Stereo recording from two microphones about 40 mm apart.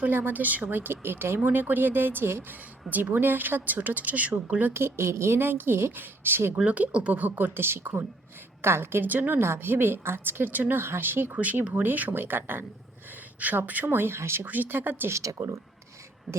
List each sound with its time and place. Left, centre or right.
0.0 s a woman's voice: right
1.5 s a woman's voice: right
3.1 s speech: right
4.7 s a woman's voice: right
6.7 s a woman's voice: right
9.0 s a woman's voice: right
11.3 s speech: right
11.7 s a woman's voice: right
13.4 s speech: right
13.8 s speech: right
14.4 s a woman's voice: right
16.3 s speech: centre